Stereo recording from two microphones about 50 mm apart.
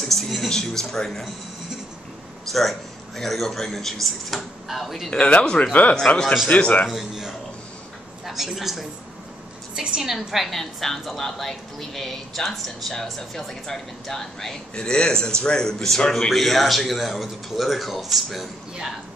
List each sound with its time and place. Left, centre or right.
0.0 s music: centre
0.5 s speech: centre
3.2 s a woman's voice: centre
5.1 s speech: left
6.9 s a man's voice: centre
9.8 s a man's voice: centre
10.1 s a woman's voice: centre
14.8 s a woman's voice: centre